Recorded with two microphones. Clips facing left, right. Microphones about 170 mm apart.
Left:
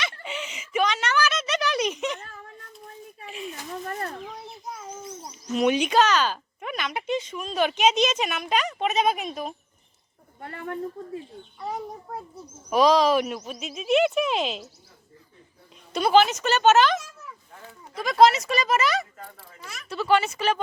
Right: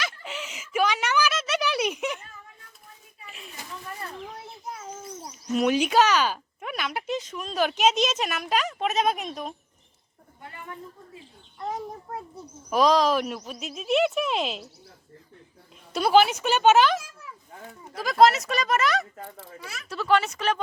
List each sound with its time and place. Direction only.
0.2 s a sound: centre (ahead or behind)
3.2 s a sound: centre (ahead or behind)
4.4 s a child's voice: centre (ahead or behind)
10.4 s a woman's voice: 65° left (ahead or behind)
11.6 s speech: centre (ahead or behind)
15.9 s speech: 5° right (ahead or behind)